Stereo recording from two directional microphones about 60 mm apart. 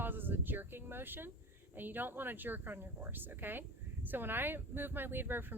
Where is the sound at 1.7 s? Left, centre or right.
Right.